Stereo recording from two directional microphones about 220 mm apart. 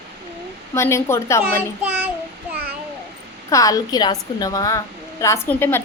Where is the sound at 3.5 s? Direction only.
15° left (ahead or behind).